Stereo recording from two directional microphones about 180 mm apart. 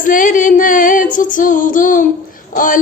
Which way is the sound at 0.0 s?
50° left (ahead or behind).